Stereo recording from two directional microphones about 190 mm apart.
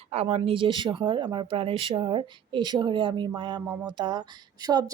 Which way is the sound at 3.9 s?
25° right (ahead or behind).